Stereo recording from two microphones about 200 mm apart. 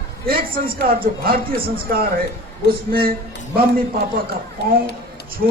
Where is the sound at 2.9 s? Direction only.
45° right (ahead or behind).